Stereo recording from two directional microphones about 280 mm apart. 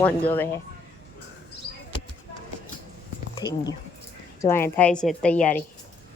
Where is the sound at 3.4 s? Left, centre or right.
Centre.